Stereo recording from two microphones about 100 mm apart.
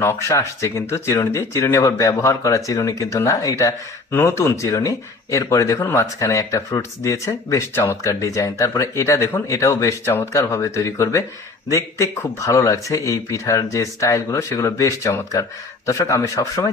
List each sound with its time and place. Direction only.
0.0 s speech: 25° left (ahead or behind)